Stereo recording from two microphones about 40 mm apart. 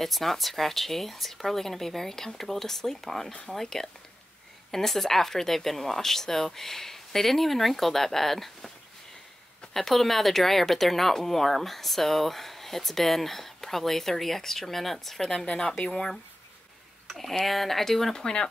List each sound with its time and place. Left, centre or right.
0.0 s speech: centre
9.8 s speech: centre
15.4 s speech: left
17.1 s speech: centre
18.1 s speech: centre